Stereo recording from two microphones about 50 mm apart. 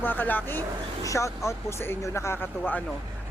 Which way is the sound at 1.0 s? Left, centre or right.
Left.